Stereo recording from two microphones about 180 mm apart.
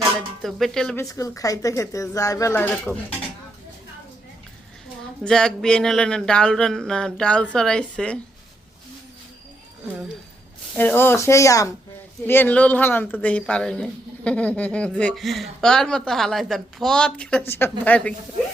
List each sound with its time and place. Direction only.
0.2 s speech: centre (ahead or behind)
0.9 s speech: 15° left (ahead or behind)
5.2 s speech: 5° left (ahead or behind)
10.8 s speech: 10° left (ahead or behind)